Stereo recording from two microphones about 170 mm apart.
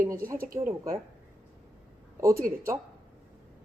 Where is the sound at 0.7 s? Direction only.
20° right (ahead or behind).